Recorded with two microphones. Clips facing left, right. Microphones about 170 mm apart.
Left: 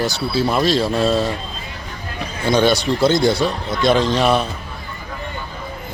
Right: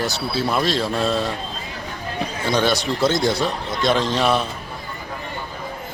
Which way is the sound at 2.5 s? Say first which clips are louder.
Left 5 dB; centre (ahead or behind).